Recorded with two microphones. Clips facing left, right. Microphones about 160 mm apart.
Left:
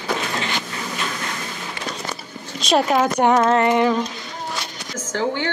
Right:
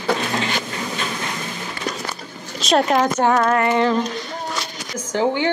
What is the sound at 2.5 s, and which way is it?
Speech, centre (ahead or behind).